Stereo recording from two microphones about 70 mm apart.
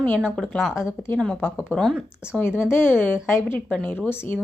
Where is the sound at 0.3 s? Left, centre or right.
Centre.